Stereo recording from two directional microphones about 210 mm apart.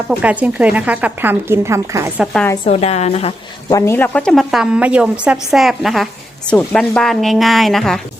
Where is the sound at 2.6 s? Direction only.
30° left (ahead or behind).